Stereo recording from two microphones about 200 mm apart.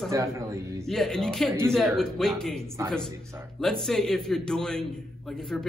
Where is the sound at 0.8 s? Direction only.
Centre (ahead or behind).